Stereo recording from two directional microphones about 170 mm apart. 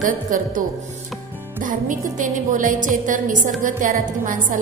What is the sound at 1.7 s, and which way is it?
A woman's voice, 50° right (ahead or behind).